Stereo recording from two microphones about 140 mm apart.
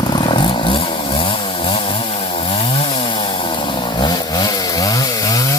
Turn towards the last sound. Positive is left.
turn(degrees=30)  # may be behind; listen again after turning